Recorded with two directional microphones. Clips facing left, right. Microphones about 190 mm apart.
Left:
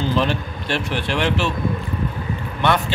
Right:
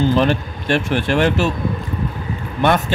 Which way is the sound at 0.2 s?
50° right (ahead or behind).